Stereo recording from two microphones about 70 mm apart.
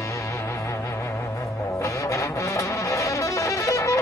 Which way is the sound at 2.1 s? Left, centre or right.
Left.